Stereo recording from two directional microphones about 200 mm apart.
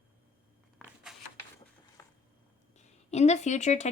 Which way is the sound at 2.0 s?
15° left (ahead or behind).